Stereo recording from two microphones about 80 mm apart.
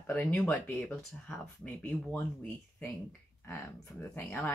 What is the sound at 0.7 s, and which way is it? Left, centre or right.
Speech, centre.